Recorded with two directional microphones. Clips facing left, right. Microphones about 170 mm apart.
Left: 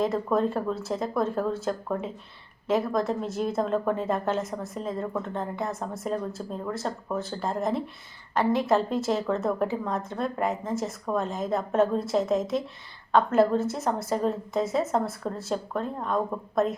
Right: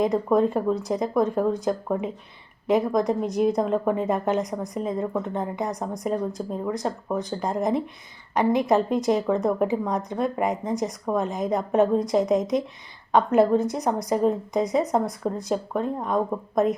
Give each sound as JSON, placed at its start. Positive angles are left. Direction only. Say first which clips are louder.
{"t": 0.0, "sound": "a woman's voice", "louder": "right 4 dB", "side_deg": -15}